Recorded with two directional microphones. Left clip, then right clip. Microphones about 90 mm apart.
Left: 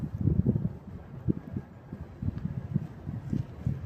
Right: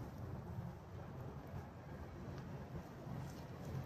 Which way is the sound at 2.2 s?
25° right (ahead or behind).